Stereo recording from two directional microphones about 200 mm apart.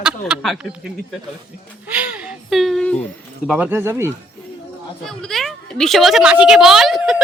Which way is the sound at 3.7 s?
10° right (ahead or behind).